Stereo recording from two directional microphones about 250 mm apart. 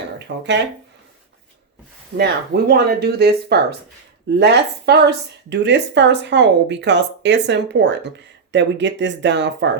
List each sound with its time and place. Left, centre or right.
0.3 s speech: right
2.1 s speech: right